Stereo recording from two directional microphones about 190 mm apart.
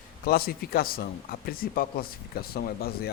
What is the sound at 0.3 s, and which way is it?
Speech, 50° left (ahead or behind).